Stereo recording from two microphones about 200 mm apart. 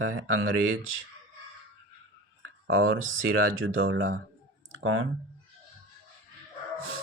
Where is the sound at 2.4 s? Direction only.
90° right.